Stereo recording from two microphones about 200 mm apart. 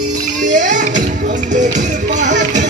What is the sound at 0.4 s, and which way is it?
Music, 40° right (ahead or behind).